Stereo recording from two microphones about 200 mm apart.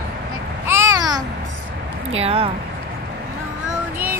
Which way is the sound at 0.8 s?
15° right (ahead or behind).